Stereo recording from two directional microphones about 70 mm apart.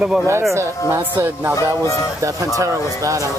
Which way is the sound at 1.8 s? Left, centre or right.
Left.